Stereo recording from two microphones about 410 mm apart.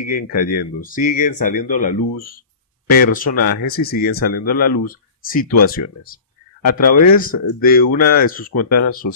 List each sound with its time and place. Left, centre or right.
0.0 s speech: centre
3.3 s speech: left
3.6 s speech: left